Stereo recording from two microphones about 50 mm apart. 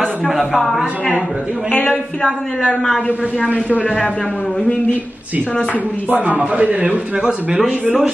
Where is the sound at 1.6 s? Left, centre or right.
Left.